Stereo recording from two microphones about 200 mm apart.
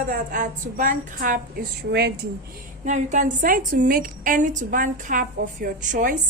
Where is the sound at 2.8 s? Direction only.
35° right (ahead or behind).